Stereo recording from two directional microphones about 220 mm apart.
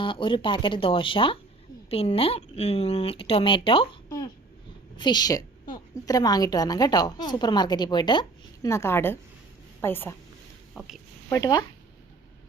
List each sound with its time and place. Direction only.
0.0 s a woman's voice: 20° left (ahead or behind)
10.8 s speech: 5° right (ahead or behind)
11.3 s a woman's voice: 15° left (ahead or behind)